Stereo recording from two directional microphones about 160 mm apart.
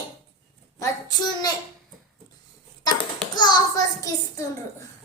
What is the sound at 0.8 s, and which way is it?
Speech, 25° left (ahead or behind).